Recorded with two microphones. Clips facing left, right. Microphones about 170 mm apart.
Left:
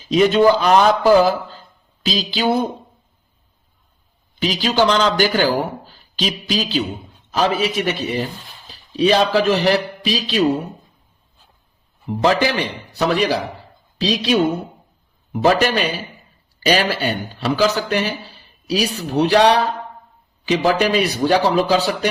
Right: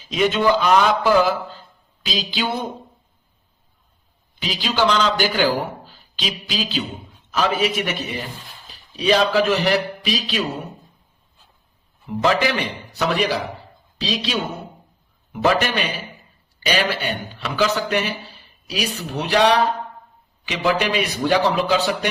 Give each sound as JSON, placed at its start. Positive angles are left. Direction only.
{"t": 0.1, "sound": "a man's voice", "side_deg": 35}
{"t": 4.4, "sound": "a man's voice", "side_deg": 45}
{"t": 12.2, "sound": "a man's voice", "side_deg": 35}